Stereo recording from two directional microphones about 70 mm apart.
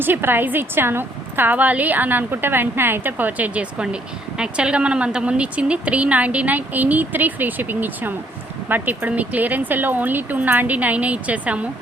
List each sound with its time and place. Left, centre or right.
0.0 s a woman's voice: right